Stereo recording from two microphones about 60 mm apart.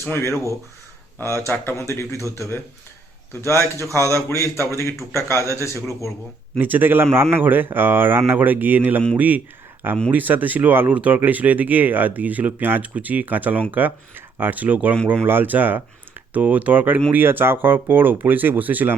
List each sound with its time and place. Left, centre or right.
0.0 s speech: left
6.6 s speech: right